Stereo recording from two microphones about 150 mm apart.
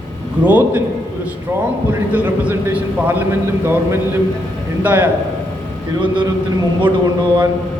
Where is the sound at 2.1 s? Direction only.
10° right (ahead or behind).